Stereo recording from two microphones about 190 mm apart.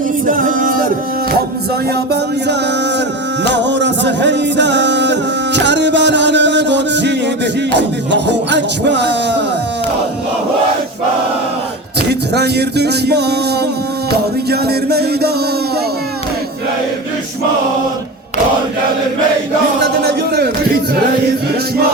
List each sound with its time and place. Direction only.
0.3 s a capella: 45° right (ahead or behind)
3.5 s music: 70° right (ahead or behind)
12.0 s music: 60° right (ahead or behind)
14.5 s speech: 55° right (ahead or behind)
19.8 s speech: 60° right (ahead or behind)